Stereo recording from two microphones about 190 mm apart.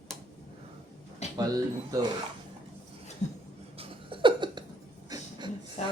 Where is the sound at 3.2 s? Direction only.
35° left (ahead or behind).